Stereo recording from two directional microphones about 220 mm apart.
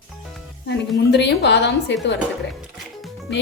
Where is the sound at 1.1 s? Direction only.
50° left (ahead or behind).